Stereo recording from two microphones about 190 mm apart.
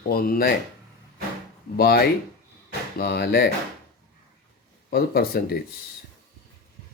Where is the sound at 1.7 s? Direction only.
55° left (ahead or behind).